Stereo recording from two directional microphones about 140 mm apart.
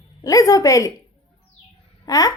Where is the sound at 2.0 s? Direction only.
25° left (ahead or behind).